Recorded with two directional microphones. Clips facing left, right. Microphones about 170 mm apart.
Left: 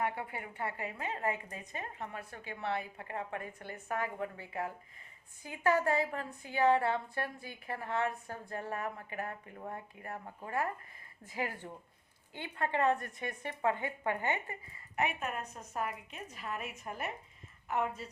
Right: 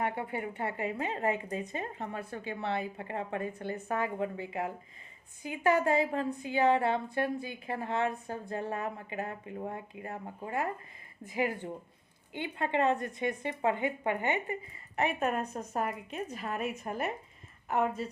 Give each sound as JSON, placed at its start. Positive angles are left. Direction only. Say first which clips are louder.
{"t": 0.0, "sound": "a woman's voice", "louder": "right 3 dB", "side_deg": -25}
{"t": 14.9, "sound": "a woman's voice", "louder": "right 5 dB", "side_deg": -35}